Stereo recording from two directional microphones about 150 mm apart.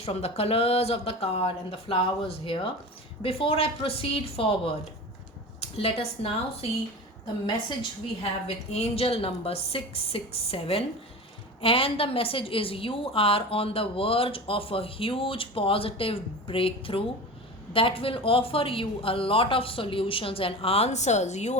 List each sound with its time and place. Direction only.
0.0 s a woman's voice: 45° left (ahead or behind)
8.4 s a woman's voice: 45° left (ahead or behind)